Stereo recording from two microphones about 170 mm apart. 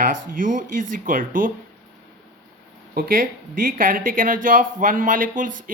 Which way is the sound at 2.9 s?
55° right (ahead or behind).